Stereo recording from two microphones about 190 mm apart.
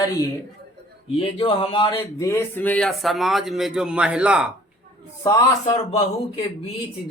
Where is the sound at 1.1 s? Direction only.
30° left (ahead or behind).